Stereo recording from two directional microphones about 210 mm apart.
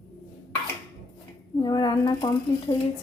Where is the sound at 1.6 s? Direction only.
20° left (ahead or behind).